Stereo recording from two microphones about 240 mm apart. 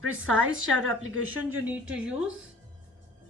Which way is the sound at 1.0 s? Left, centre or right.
Right.